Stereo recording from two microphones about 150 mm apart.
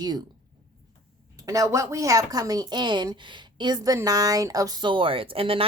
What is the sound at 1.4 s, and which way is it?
A woman's voice, 20° right (ahead or behind).